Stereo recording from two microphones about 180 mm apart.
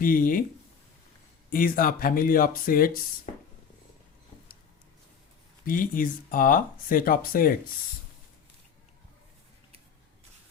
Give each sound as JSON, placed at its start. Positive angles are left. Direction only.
{"t": 0.0, "sound": "speech", "side_deg": 50}
{"t": 1.5, "sound": "speech", "side_deg": 50}
{"t": 5.6, "sound": "speech", "side_deg": 50}